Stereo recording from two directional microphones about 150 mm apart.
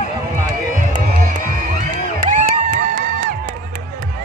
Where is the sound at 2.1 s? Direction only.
65° right (ahead or behind).